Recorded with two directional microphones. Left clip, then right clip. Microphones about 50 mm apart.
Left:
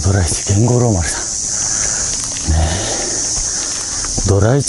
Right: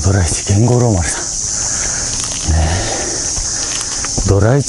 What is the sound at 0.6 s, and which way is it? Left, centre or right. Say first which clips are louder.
Speech: right 1 dB; left.